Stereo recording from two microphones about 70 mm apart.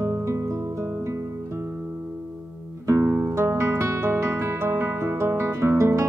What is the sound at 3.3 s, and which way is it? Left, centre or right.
Music, right.